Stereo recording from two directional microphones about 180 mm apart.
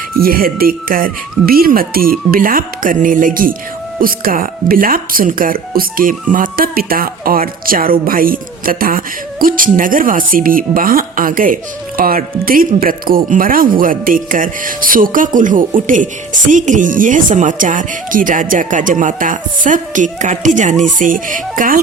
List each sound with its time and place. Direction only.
0.2 s speech: 55° right (ahead or behind)